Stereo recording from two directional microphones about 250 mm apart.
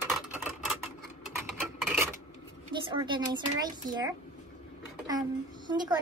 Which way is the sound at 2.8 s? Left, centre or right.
Centre.